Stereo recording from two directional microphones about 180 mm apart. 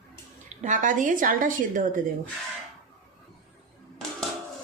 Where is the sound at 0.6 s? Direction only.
45° right (ahead or behind).